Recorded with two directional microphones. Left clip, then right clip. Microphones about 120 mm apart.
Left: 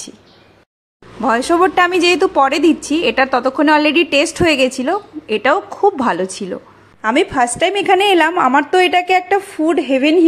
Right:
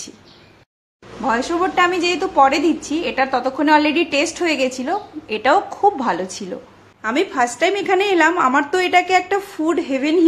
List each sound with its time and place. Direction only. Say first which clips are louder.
1.2 s a woman's voice: left 6 dB; 65° left (ahead or behind); by 6.6 s 35° left (ahead or behind)
7.0 s a woman's voice: left 4 dB; 45° left (ahead or behind)